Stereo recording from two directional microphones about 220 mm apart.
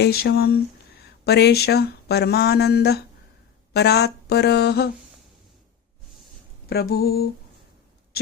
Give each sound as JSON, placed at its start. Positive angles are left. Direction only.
{"t": 0.0, "sound": "speech", "side_deg": 45}
{"t": 6.7, "sound": "speech", "side_deg": 45}